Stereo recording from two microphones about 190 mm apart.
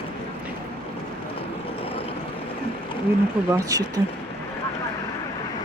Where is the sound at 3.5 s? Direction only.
20° right (ahead or behind).